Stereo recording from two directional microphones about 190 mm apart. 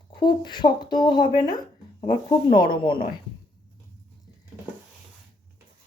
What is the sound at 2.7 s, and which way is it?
Speech, 25° left (ahead or behind).